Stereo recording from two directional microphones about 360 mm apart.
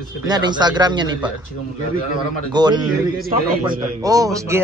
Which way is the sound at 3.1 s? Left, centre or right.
Right.